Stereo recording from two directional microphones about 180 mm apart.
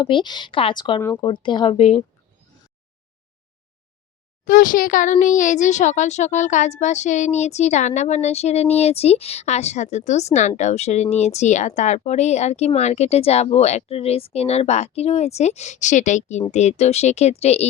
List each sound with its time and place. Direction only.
0.0 s speech: 25° left (ahead or behind)
4.4 s a child's voice: 50° left (ahead or behind)